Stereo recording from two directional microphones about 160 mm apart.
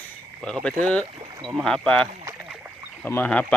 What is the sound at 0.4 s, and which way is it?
Speech, 5° left (ahead or behind).